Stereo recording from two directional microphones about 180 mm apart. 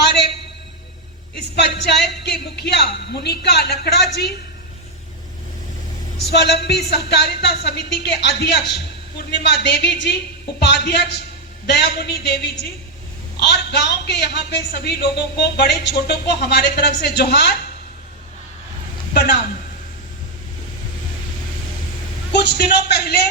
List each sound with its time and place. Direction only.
1.5 s speech: 65° left (ahead or behind)
6.3 s speech: 70° left (ahead or behind)
13.5 s a man's voice: 65° left (ahead or behind)
19.1 s a man's voice: 60° left (ahead or behind)
22.3 s a man's voice: 65° left (ahead or behind)